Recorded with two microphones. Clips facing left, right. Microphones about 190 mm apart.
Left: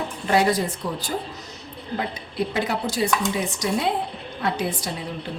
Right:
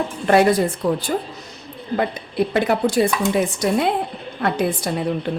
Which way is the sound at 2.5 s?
60° right (ahead or behind).